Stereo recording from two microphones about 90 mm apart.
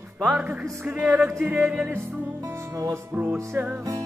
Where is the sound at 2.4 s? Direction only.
35° right (ahead or behind).